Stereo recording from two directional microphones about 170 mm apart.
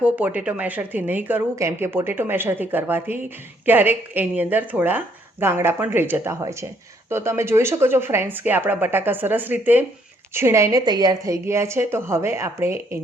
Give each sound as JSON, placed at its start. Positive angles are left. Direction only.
{"t": 0.0, "sound": "a woman's voice", "side_deg": -10}